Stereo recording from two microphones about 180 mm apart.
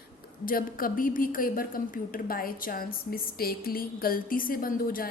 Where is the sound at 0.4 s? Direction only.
50° left (ahead or behind).